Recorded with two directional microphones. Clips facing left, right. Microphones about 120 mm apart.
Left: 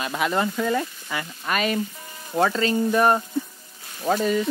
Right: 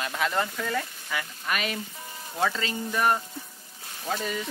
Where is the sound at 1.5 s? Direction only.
40° left (ahead or behind).